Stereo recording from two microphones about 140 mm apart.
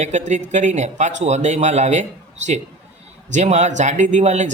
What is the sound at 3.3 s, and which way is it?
Speech, 55° right (ahead or behind).